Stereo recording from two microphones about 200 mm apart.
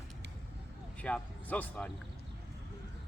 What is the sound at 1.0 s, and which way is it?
Speech, 5° left (ahead or behind).